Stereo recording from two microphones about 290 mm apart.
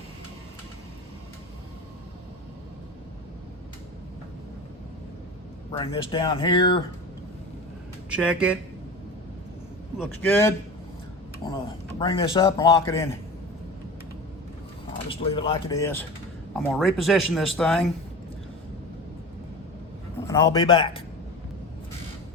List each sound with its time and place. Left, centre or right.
5.7 s a man's voice: centre
8.1 s speech: centre
10.0 s a man's voice: centre
15.1 s a man's voice: centre
20.2 s a man's voice: centre